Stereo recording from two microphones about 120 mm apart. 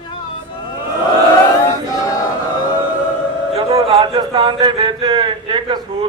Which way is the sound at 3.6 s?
55° right (ahead or behind).